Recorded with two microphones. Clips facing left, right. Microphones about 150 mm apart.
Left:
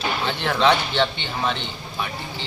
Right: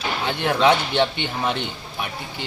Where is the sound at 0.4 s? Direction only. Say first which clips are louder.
Right 2 dB; 15° right (ahead or behind).